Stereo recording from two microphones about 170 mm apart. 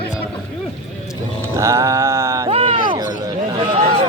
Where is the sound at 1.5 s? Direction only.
15° right (ahead or behind).